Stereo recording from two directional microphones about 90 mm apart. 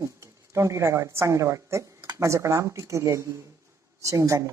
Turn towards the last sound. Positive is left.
turn(degrees=-35)  # may be behind; listen again after turning